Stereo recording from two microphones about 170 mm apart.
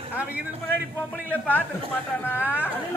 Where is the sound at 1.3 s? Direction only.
10° left (ahead or behind).